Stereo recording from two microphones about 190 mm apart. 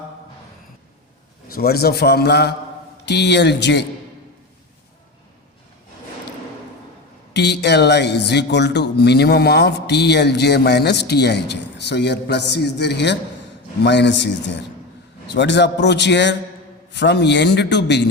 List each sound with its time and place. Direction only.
1.5 s speech: 55° left (ahead or behind)
7.3 s a man's voice: 65° left (ahead or behind)